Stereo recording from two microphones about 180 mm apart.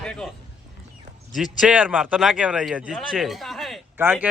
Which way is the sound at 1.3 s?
5° right (ahead or behind).